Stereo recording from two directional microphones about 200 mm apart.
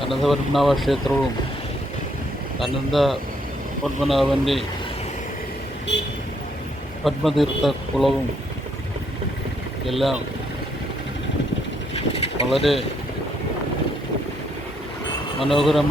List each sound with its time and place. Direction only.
0.0 s speech: centre (ahead or behind)
2.6 s speech: centre (ahead or behind)
7.0 s speech: centre (ahead or behind)
9.8 s speech: centre (ahead or behind)
11.9 s boat: 30° left (ahead or behind)
12.5 s speech: centre (ahead or behind)
15.4 s speech: centre (ahead or behind)